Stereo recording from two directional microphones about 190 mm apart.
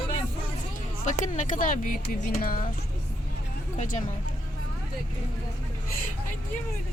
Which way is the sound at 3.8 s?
40° left (ahead or behind).